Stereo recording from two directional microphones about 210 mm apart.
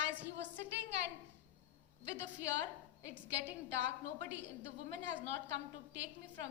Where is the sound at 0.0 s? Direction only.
55° right (ahead or behind).